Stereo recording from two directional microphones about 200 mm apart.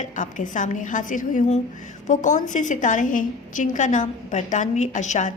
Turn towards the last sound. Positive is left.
turn(degrees=35)  # may be behind; listen again after turning